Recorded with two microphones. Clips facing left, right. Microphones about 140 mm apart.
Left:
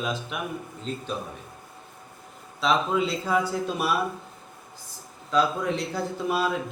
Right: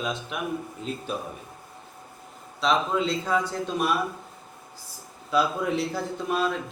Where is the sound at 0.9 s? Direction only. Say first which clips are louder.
Left 1 dB; 10° right (ahead or behind).